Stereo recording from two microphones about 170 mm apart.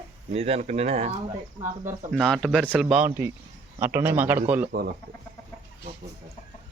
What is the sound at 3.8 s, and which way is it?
Speech, 10° right (ahead or behind).